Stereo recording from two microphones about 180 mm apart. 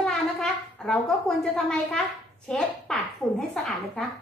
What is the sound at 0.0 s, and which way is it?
A woman's voice, 5° left (ahead or behind).